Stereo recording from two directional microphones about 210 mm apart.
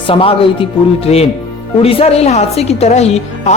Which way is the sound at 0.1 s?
25° left (ahead or behind).